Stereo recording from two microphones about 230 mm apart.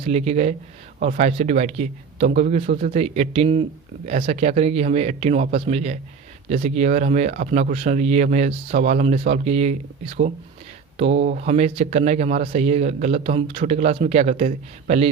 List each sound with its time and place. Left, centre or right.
0.0 s speech: right